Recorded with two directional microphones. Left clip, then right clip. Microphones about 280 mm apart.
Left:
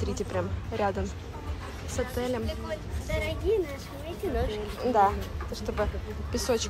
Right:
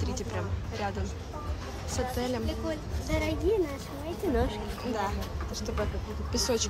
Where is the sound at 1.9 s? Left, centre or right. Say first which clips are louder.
Left 1 dB; centre.